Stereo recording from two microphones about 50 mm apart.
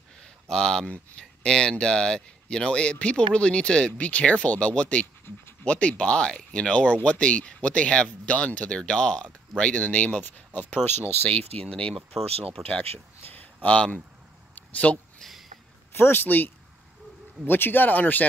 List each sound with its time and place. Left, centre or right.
0.2 s a sound: centre
0.8 s speech: left
1.4 s speech: centre
10.2 s speech: left
11.2 s speech: left
11.9 s speech: centre
13.3 s a sound: left
15.9 s speech: left